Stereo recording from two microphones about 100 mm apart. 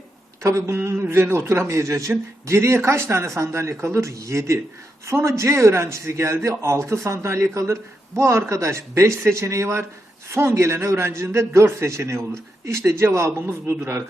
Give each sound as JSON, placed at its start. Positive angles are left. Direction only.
{"t": 0.4, "sound": "a man's voice", "side_deg": -25}